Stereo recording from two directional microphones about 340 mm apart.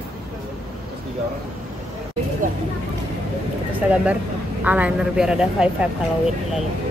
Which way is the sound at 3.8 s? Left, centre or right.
Centre.